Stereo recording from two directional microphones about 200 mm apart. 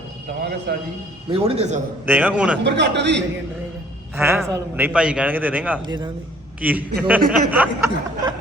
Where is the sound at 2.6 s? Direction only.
60° right (ahead or behind).